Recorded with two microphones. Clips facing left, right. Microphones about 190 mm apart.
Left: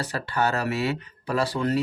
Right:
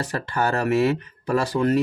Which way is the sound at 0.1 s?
50° right (ahead or behind).